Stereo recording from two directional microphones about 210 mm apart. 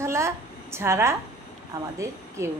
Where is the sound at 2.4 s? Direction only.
15° right (ahead or behind).